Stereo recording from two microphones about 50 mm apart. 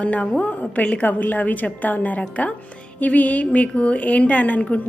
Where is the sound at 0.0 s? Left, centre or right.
Left.